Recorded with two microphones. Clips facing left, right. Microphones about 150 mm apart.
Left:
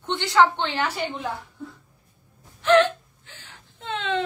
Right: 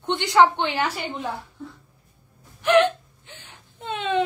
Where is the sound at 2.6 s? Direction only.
15° right (ahead or behind).